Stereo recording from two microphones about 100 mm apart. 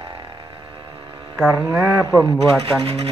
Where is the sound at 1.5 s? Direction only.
20° right (ahead or behind).